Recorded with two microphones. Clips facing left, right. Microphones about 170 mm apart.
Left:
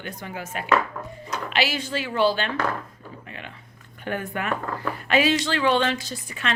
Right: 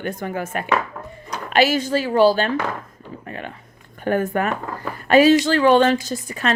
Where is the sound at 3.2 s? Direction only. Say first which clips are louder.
Right 9 dB; 45° right (ahead or behind).